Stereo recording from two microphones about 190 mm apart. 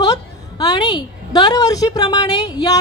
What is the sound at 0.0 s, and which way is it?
A woman's voice, 20° left (ahead or behind).